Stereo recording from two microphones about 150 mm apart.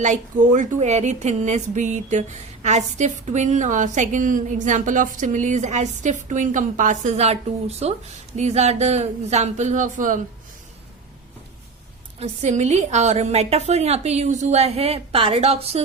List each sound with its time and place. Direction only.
0.0 s a woman's voice: 55° right (ahead or behind)
12.2 s a woman's voice: 50° right (ahead or behind)